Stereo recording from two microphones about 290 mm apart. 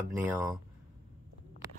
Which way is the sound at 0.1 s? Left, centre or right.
Centre.